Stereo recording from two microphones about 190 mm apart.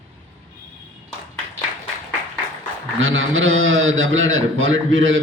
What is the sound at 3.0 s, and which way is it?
A man's voice, 90° right.